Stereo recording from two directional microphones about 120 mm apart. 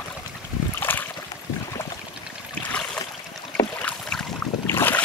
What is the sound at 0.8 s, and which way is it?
Boat, 15° left (ahead or behind).